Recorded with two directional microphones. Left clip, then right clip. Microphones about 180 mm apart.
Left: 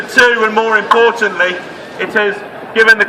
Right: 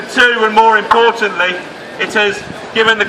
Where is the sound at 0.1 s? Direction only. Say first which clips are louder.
Left 1 dB; 15° left (ahead or behind).